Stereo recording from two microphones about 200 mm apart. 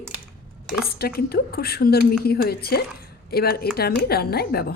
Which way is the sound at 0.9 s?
50° left (ahead or behind).